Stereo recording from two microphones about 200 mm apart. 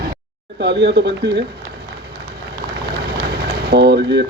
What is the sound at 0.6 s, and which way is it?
Speech, 60° right (ahead or behind).